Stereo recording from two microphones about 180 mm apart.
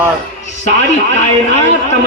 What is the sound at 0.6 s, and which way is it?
A man's voice, 40° left (ahead or behind).